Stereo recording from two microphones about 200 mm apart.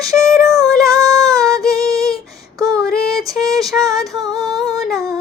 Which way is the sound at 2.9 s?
15° right (ahead or behind).